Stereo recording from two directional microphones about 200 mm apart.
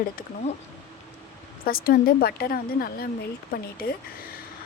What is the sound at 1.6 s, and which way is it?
Speech, 50° left (ahead or behind).